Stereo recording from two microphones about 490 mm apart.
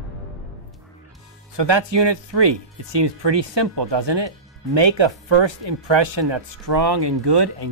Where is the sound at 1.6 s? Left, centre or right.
Right.